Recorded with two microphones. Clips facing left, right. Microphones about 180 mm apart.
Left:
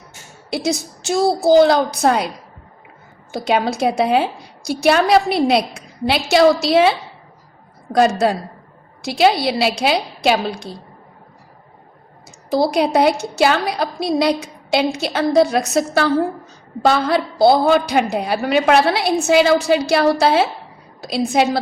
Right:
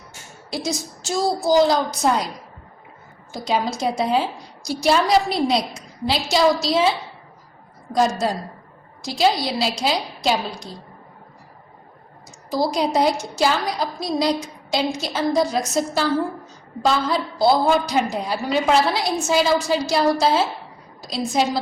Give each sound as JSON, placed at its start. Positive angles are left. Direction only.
{"t": 0.5, "sound": "a woman's voice", "side_deg": 65}
{"t": 3.3, "sound": "a woman's voice", "side_deg": 65}
{"t": 7.9, "sound": "a woman's voice", "side_deg": 65}
{"t": 12.5, "sound": "a woman's voice", "side_deg": 65}